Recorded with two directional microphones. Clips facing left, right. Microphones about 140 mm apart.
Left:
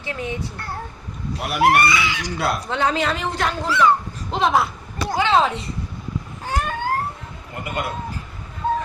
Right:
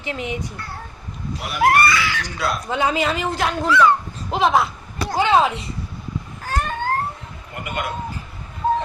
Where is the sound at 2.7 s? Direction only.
10° right (ahead or behind).